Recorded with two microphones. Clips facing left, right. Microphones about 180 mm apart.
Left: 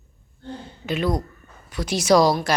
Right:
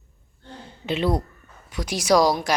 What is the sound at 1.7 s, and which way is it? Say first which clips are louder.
Speech: left 2 dB; 15° right (ahead or behind).